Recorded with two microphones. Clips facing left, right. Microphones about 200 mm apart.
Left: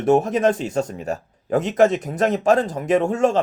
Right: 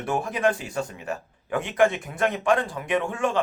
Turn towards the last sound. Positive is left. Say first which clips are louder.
# left 6 dB
turn(degrees=40)  # may be behind; listen again after turning